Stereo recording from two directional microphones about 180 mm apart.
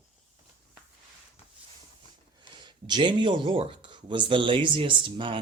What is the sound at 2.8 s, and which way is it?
Speech, 25° right (ahead or behind).